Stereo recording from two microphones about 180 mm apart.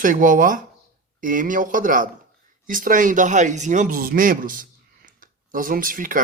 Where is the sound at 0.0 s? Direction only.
45° right (ahead or behind).